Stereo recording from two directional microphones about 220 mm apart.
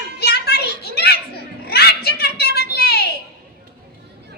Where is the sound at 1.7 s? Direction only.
45° left (ahead or behind).